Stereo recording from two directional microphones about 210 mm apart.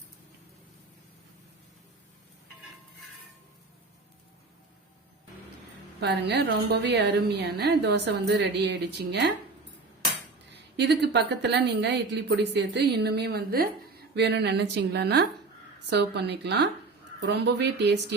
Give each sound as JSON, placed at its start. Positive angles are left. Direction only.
{"t": 6.0, "sound": "a woman's voice", "side_deg": -55}
{"t": 10.8, "sound": "a woman's voice", "side_deg": -55}